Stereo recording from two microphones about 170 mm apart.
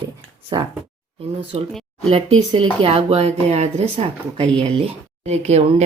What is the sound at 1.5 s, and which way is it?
A woman's voice, 35° right (ahead or behind).